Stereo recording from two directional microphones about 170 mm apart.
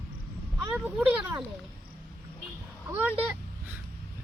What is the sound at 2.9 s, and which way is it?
Speech, 15° right (ahead or behind).